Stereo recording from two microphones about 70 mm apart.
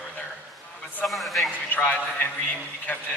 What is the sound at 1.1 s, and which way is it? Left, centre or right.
Speech, centre.